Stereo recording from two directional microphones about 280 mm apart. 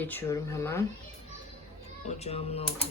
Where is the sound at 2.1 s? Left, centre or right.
Left.